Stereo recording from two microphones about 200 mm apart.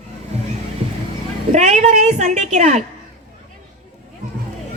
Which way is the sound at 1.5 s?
35° right (ahead or behind).